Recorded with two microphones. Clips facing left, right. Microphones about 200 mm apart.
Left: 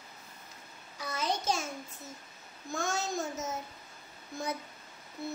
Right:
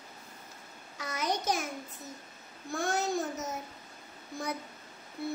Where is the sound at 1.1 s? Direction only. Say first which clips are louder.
Right 1 dB; 15° right (ahead or behind).